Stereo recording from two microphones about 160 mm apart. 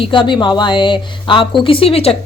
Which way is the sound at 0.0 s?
30° left (ahead or behind).